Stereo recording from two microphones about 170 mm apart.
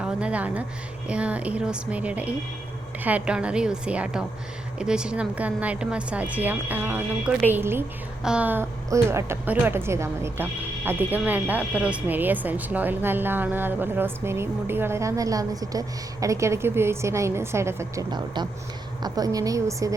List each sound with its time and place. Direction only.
0.0 s a woman's voice: 5° right (ahead or behind)